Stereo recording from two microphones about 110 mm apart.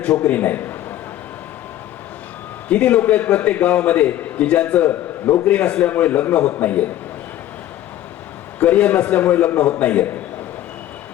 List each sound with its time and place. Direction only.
0.0 s a man's voice: 15° left (ahead or behind)
2.6 s a man's voice: 15° left (ahead or behind)
8.5 s a man's voice: 15° left (ahead or behind)